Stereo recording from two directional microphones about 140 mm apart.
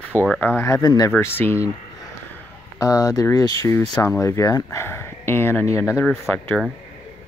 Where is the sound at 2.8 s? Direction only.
25° left (ahead or behind); by 6.6 s 10° left (ahead or behind).